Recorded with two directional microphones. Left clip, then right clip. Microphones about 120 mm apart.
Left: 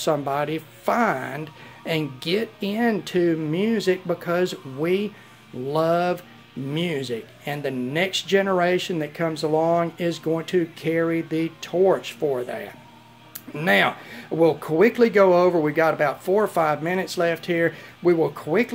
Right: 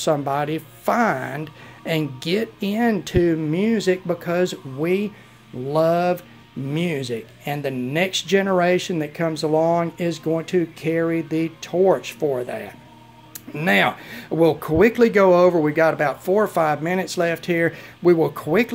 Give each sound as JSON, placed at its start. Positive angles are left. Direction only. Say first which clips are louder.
{"t": 0.0, "sound": "speech", "louder": "right 2 dB", "side_deg": -20}